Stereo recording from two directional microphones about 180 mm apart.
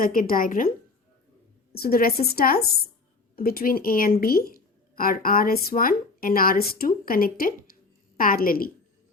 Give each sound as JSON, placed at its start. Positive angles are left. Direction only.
{"t": 0.0, "sound": "speech", "side_deg": 50}
{"t": 1.7, "sound": "speech", "side_deg": 55}